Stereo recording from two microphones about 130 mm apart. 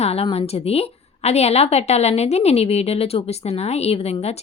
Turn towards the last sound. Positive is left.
turn(degrees=55)  # may be behind; listen again after turning